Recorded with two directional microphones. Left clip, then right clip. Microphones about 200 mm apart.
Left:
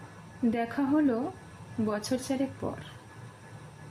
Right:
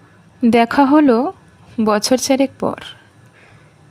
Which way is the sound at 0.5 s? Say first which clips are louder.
Right 18 dB; 50° right (ahead or behind).